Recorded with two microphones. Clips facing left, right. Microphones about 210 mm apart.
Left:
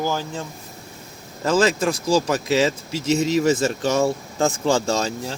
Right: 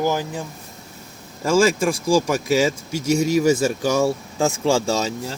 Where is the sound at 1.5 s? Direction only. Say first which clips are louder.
Right 2 dB; 10° right (ahead or behind).